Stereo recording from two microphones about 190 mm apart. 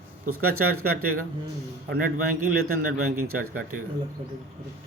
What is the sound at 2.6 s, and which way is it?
Speech, 55° right (ahead or behind).